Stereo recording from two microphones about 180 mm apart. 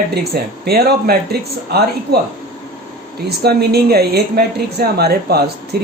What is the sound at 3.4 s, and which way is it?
A woman's voice, 60° right (ahead or behind).